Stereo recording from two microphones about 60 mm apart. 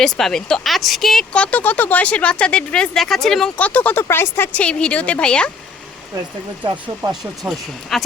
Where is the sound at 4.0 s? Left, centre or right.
Left.